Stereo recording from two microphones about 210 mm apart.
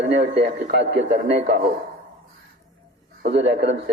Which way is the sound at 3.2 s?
55° right (ahead or behind).